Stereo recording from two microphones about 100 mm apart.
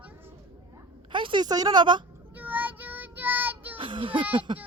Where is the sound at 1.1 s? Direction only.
55° right (ahead or behind).